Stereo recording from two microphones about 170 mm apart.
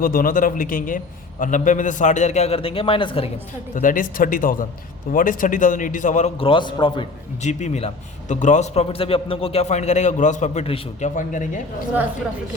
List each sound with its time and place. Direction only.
0.0 s a man's voice: 55° left (ahead or behind); by 3.2 s 30° left (ahead or behind)
3.8 s a man's voice: 55° left (ahead or behind)
6.3 s a man's voice: 30° left (ahead or behind)
7.4 s a man's voice: 45° left (ahead or behind)